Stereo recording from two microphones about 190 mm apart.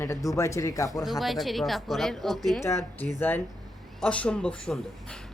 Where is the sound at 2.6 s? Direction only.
15° left (ahead or behind).